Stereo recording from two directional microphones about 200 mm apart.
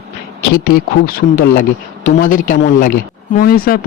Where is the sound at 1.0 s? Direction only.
45° left (ahead or behind).